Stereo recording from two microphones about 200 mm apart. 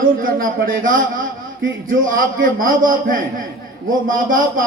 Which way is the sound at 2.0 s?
45° right (ahead or behind).